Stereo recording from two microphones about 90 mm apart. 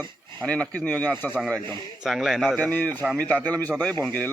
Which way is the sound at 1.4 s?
5° left (ahead or behind).